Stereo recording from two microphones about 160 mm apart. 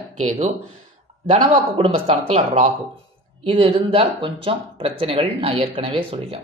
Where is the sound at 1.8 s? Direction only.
40° right (ahead or behind).